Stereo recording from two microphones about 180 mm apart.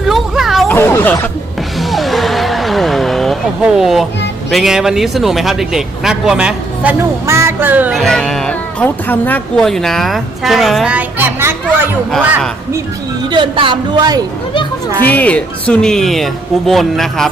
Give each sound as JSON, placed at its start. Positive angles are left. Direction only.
{"t": 0.1, "sound": "a sound", "side_deg": 0}
{"t": 0.7, "sound": "speech", "side_deg": 10}
{"t": 1.8, "sound": "music", "side_deg": 0}
{"t": 4.5, "sound": "speech", "side_deg": 0}
{"t": 13.3, "sound": "speech", "side_deg": -25}
{"t": 15.0, "sound": "speech", "side_deg": 10}